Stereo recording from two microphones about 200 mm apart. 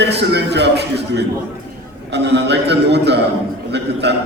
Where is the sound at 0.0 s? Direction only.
55° right (ahead or behind).